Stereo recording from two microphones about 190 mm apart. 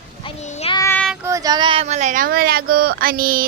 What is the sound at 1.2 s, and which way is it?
Speech, 15° right (ahead or behind).